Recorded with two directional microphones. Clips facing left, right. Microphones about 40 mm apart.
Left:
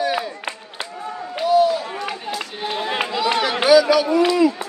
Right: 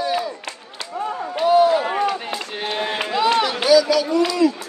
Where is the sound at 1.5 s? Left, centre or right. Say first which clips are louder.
Right 2 dB; right.